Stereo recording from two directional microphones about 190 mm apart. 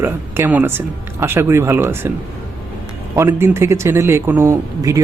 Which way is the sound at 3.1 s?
15° right (ahead or behind).